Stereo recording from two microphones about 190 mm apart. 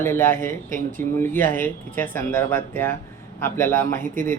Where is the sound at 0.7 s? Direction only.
45° right (ahead or behind).